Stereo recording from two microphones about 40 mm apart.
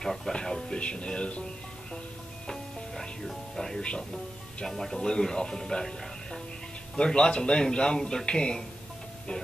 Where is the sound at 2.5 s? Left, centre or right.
Centre.